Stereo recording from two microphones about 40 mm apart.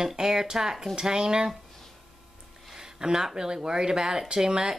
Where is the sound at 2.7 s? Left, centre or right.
Centre.